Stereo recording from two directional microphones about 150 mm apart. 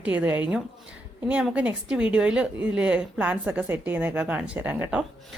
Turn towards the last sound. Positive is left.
turn(degrees=-10)  # may be behind; listen again after turning